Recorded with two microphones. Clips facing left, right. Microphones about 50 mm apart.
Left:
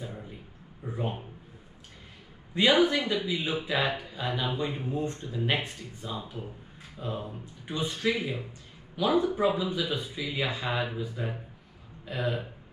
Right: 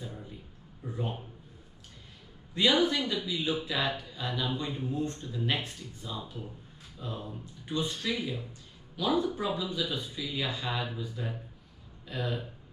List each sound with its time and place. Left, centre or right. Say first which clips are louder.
0.0 s a sound: left 2 dB; left
0.8 s speech: left 3 dB; left
2.5 s speech: left 3 dB; centre